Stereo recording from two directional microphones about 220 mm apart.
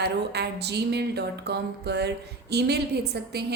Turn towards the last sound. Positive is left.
turn(degrees=-50)  # may be behind; listen again after turning